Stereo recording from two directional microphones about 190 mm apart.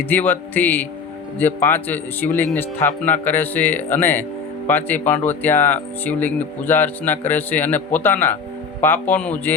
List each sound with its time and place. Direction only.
0.0 s a man's voice: 10° left (ahead or behind)